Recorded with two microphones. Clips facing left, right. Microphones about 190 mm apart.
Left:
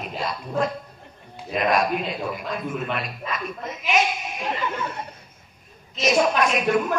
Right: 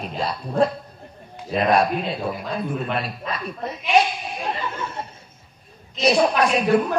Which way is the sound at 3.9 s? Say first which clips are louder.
Right 4 dB; 35° right (ahead or behind).